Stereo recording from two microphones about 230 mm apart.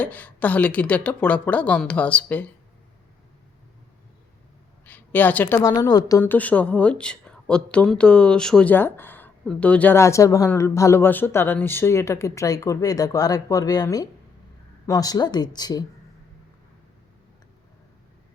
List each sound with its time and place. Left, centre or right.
0.0 s a woman's voice: centre
4.9 s a woman's voice: centre